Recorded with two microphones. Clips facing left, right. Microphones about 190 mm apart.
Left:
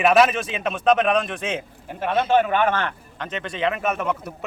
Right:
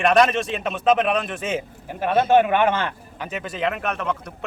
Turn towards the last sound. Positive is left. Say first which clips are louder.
# left 2 dB
turn(degrees=5)  # may be behind; listen again after turning